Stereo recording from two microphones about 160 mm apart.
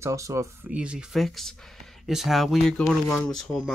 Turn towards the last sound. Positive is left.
turn(degrees=0)  # may be behind; listen again after turning